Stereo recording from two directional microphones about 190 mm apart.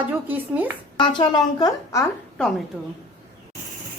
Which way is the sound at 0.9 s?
25° left (ahead or behind).